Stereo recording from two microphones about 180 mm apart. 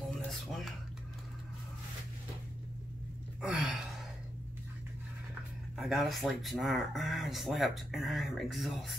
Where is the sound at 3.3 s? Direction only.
5° right (ahead or behind).